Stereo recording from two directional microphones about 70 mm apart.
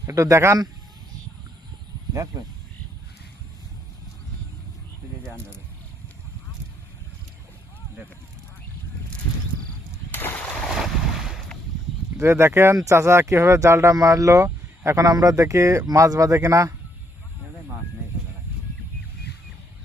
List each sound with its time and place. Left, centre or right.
0.1 s speech: right
9.9 s a sound: left
10.5 s boat: centre
12.1 s speech: right
13.9 s speech: right